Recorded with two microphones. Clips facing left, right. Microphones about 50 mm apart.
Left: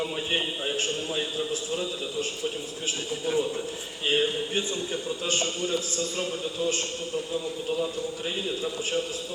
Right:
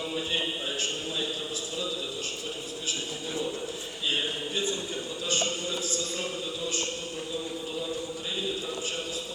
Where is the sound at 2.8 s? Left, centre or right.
Left.